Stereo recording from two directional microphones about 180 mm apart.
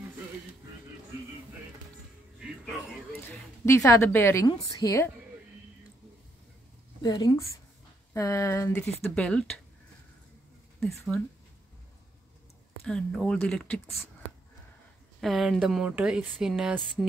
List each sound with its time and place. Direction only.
2.3 s music: 5° right (ahead or behind)
3.1 s a woman's voice: 15° left (ahead or behind)
7.0 s a woman's voice: 20° left (ahead or behind); by 9.5 s 5° left (ahead or behind)
12.8 s speech: 5° left (ahead or behind)
15.1 s speech: centre (ahead or behind)